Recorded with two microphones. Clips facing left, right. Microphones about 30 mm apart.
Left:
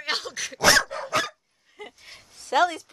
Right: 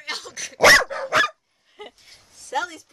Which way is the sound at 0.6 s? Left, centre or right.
Right.